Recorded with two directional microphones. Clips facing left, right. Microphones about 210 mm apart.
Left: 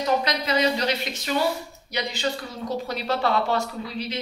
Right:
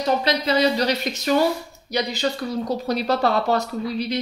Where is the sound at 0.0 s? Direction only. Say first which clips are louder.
Right 3 dB; 30° right (ahead or behind).